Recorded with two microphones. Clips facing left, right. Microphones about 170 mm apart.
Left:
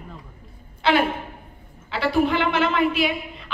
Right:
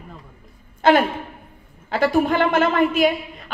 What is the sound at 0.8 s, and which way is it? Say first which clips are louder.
A woman's voice: right 4 dB; 45° right (ahead or behind).